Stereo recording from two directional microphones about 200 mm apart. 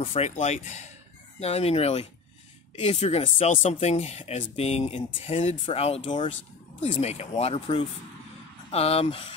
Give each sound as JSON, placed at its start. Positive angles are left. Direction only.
{"t": 0.0, "sound": "speech", "side_deg": 30}